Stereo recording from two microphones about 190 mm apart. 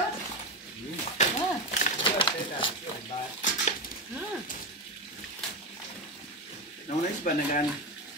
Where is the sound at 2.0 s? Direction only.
25° left (ahead or behind).